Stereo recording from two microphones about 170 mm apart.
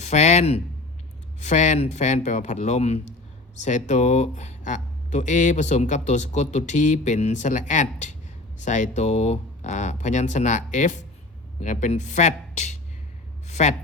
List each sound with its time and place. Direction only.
0.0 s speech: 40° left (ahead or behind)